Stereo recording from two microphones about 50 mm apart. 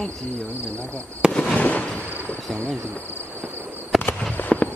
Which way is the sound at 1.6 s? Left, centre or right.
Left.